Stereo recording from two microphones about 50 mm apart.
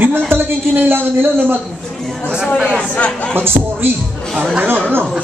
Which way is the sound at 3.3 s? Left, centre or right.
Right.